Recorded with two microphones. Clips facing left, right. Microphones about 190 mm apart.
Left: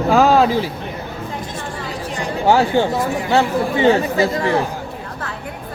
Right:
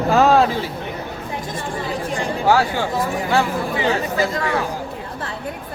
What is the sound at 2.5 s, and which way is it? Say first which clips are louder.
Speech: left 4 dB; 25° left (ahead or behind).